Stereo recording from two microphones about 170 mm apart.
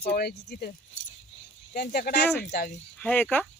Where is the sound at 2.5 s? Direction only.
60° left (ahead or behind).